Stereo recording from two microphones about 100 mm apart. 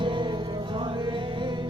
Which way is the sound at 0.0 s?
55° right (ahead or behind).